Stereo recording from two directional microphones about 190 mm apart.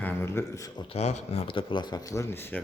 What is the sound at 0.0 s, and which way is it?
Speech, 15° left (ahead or behind).